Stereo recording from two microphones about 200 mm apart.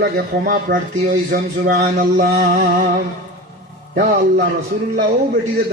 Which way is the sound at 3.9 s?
55° right (ahead or behind).